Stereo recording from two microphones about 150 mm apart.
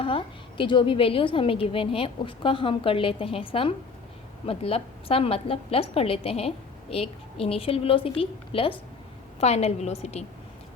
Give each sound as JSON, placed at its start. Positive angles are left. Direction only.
{"t": 0.0, "sound": "a woman's voice", "side_deg": 35}